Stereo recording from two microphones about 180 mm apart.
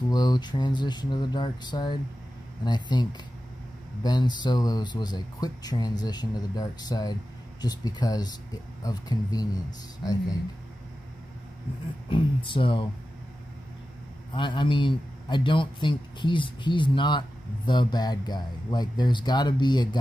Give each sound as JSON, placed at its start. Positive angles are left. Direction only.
{"t": 0.1, "sound": "speech", "side_deg": 25}
{"t": 12.1, "sound": "speech", "side_deg": 30}
{"t": 14.3, "sound": "speech", "side_deg": 25}